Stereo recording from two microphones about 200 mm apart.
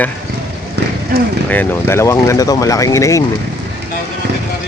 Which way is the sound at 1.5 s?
10° left (ahead or behind).